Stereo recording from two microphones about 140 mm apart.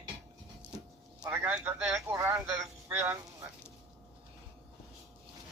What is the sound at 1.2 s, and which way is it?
A man's voice, 15° right (ahead or behind).